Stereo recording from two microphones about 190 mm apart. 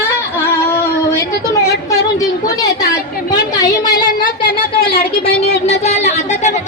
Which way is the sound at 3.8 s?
45° left (ahead or behind).